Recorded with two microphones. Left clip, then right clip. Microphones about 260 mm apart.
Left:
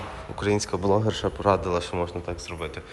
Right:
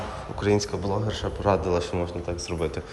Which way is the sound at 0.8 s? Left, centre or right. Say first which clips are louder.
Left 5 dB; centre.